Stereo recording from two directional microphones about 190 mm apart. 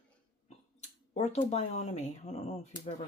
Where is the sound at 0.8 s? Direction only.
35° left (ahead or behind).